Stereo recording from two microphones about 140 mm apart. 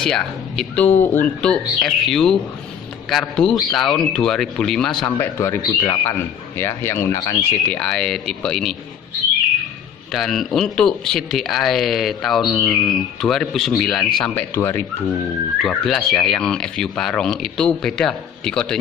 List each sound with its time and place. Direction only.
0.0 s speech: 5° left (ahead or behind); by 7.3 s 20° left (ahead or behind)
7.7 s speech: 5° left (ahead or behind)
10.1 s speech: centre (ahead or behind)
14.2 s speech: 15° left (ahead or behind)
15.6 s speech: 5° left (ahead or behind)